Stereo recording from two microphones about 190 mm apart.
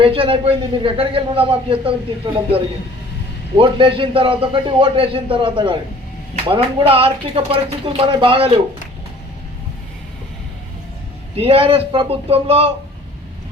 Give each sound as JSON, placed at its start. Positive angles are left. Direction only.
{"t": 0.0, "sound": "a man's voice", "side_deg": -30}
{"t": 3.6, "sound": "a man's voice", "side_deg": -25}
{"t": 11.3, "sound": "speech", "side_deg": -30}